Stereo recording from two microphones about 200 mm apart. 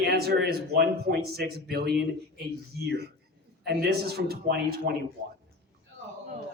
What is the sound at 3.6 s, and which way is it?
A man's voice, 55° right (ahead or behind).